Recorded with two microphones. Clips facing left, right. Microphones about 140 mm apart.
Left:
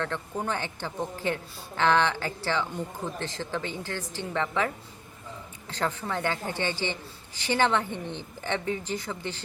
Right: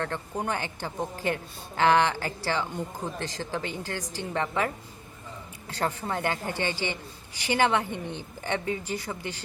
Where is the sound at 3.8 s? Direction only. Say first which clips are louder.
Even; 15° right (ahead or behind).